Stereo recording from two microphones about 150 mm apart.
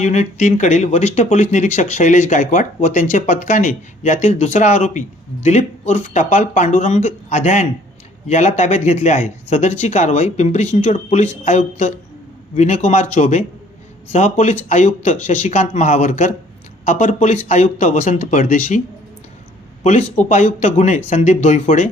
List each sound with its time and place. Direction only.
0.0 s speech: 50° left (ahead or behind)
19.8 s speech: 50° left (ahead or behind)